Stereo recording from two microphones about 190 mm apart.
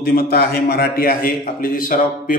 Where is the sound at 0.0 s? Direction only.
55° left (ahead or behind).